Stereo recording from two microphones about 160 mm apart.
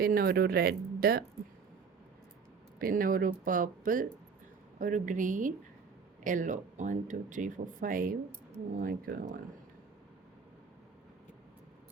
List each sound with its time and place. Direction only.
0.0 s speech: 65° right (ahead or behind)
2.7 s speech: 65° right (ahead or behind)